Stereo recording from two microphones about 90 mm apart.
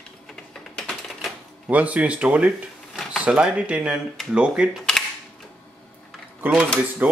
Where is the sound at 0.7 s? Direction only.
10° left (ahead or behind).